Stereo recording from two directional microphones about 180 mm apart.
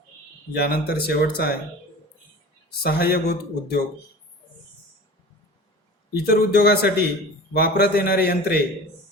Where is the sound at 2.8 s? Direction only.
55° left (ahead or behind).